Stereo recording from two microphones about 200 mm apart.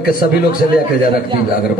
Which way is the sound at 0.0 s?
45° left (ahead or behind).